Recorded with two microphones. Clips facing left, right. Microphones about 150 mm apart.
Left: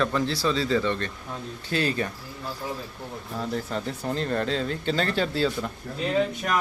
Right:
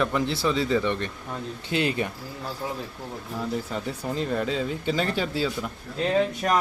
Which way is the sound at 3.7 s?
10° right (ahead or behind).